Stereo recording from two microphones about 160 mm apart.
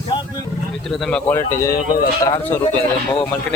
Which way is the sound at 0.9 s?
Centre (ahead or behind).